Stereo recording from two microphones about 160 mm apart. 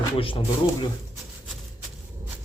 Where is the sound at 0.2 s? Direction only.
35° left (ahead or behind).